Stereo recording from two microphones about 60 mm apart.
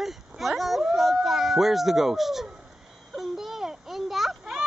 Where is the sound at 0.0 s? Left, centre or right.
Centre.